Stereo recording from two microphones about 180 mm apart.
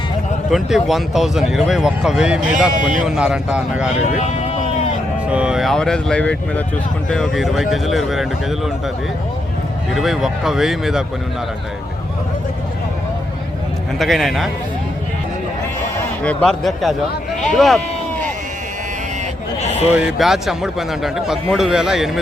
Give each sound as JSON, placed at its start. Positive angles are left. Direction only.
{"t": 0.5, "sound": "a man's voice", "side_deg": 0}
{"t": 5.3, "sound": "a man's voice", "side_deg": -5}
{"t": 9.9, "sound": "a man's voice", "side_deg": 0}
{"t": 14.0, "sound": "a man's voice", "side_deg": 0}
{"t": 16.2, "sound": "a man's voice", "side_deg": 5}
{"t": 19.6, "sound": "sheep", "side_deg": 35}
{"t": 19.9, "sound": "a man's voice", "side_deg": -5}